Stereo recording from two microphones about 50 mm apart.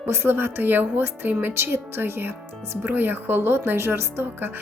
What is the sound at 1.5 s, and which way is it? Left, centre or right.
Speech, right.